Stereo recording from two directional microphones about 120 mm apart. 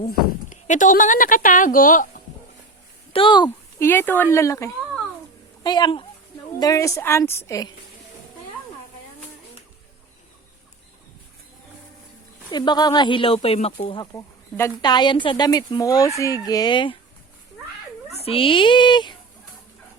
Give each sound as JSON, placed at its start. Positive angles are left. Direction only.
{"t": 0.5, "sound": "speech", "side_deg": 90}
{"t": 3.1, "sound": "speech", "side_deg": 45}
{"t": 3.8, "sound": "a woman's voice", "side_deg": 20}
{"t": 5.6, "sound": "speech", "side_deg": 35}
{"t": 6.6, "sound": "a woman's voice", "side_deg": 30}
{"t": 12.5, "sound": "speech", "side_deg": 35}
{"t": 14.2, "sound": "a sound", "side_deg": 20}
{"t": 14.8, "sound": "speech", "side_deg": 35}
{"t": 15.8, "sound": "speech", "side_deg": 30}
{"t": 18.1, "sound": "speech", "side_deg": 55}